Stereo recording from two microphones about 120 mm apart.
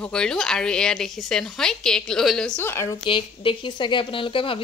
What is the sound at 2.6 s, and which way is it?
Speech, 20° left (ahead or behind).